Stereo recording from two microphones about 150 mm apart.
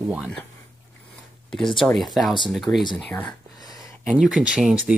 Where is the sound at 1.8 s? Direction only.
Centre (ahead or behind).